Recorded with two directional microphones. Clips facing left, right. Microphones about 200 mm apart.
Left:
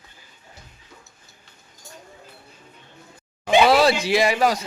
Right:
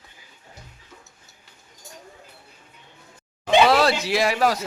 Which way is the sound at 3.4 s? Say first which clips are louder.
Left 1 dB; centre (ahead or behind).